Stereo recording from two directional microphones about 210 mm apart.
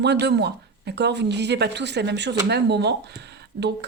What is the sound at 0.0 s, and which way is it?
A woman's voice, 55° right (ahead or behind).